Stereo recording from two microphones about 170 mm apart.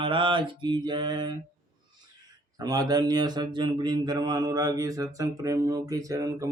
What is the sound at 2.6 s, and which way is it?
Mantra, 20° right (ahead or behind).